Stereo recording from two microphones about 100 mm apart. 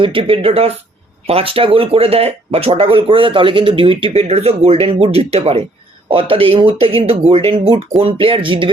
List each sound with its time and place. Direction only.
0.0 s speech: 60° right (ahead or behind); by 0.7 s 80° right
1.3 s speech: 70° right (ahead or behind); by 5.6 s 90° right
6.1 s speech: 65° right (ahead or behind)